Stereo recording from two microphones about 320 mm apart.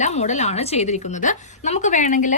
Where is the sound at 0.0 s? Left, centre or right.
Left.